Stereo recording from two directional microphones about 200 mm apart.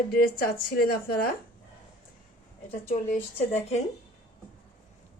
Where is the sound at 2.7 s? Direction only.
40° left (ahead or behind).